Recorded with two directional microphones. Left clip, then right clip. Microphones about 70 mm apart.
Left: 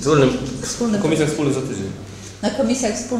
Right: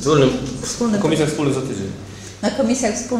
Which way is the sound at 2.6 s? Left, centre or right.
Right.